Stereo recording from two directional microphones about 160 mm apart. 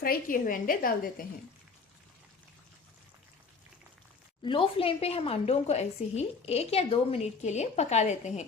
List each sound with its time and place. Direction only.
0.0 s a woman's voice: 60° left (ahead or behind)
4.4 s a woman's voice: 35° left (ahead or behind)